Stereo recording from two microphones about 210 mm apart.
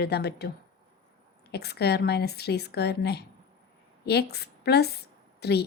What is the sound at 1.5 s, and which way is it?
A woman's voice, 50° left (ahead or behind).